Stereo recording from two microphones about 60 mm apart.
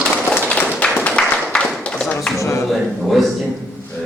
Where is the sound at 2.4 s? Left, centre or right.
Left.